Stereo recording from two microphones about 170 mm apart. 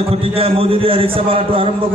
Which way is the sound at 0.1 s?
35° right (ahead or behind).